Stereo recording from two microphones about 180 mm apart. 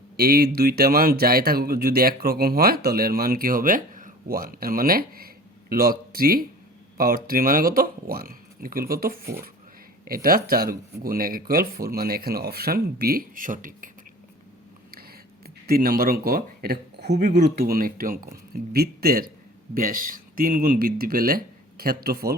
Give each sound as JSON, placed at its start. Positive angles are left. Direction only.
{"t": 0.2, "sound": "speech", "side_deg": -55}
{"t": 15.4, "sound": "speech", "side_deg": -55}